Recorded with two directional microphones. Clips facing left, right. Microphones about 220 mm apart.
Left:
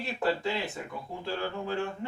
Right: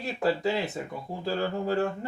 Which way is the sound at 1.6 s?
40° right (ahead or behind).